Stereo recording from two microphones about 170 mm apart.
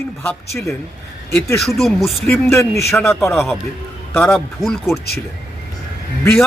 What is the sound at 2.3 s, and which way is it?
Speech, 15° left (ahead or behind).